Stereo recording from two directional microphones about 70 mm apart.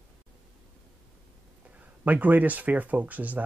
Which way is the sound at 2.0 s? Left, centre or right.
Right.